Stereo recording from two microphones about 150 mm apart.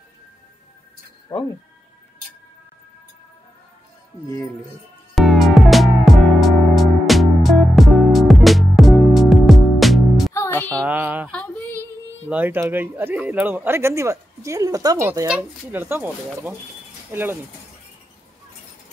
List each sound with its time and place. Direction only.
1.3 s speech: 20° left (ahead or behind)
5.1 s music: centre (ahead or behind)
10.3 s music: 15° left (ahead or behind)
10.9 s a sound: 15° right (ahead or behind)
11.3 s female singing: 10° left (ahead or behind)
12.3 s speech: 10° right (ahead or behind)
15.2 s speech: 10° right (ahead or behind)